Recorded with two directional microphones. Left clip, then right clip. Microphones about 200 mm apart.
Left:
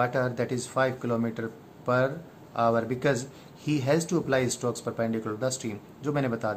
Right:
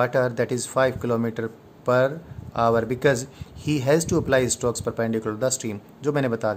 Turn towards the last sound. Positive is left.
turn(degrees=-50)  # may be behind; listen again after turning